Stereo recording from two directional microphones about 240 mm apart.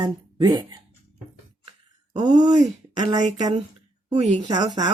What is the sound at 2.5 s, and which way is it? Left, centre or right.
Speech, centre.